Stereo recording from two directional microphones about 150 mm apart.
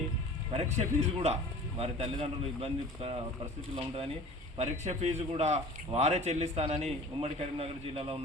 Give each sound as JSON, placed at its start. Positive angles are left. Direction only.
{"t": 0.5, "sound": "a man's voice", "side_deg": -45}
{"t": 4.5, "sound": "a man's voice", "side_deg": -45}